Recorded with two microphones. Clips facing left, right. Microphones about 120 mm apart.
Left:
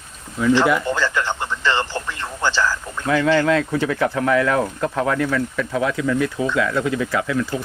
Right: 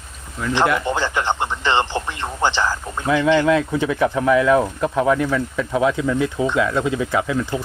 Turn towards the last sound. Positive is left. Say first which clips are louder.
# right 1 dB
turn(degrees=-20)  # may be behind; listen again after turning